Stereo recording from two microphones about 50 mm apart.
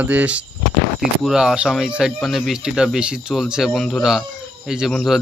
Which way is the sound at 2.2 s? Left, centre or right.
Centre.